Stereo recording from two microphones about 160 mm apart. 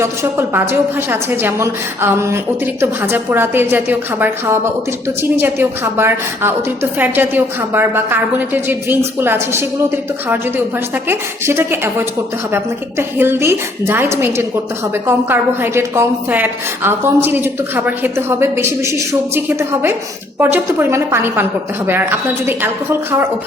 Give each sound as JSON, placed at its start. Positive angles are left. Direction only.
{"t": 0.0, "sound": "a woman's voice", "side_deg": -15}
{"t": 11.1, "sound": "a woman's voice", "side_deg": -15}
{"t": 22.4, "sound": "a woman's voice", "side_deg": -15}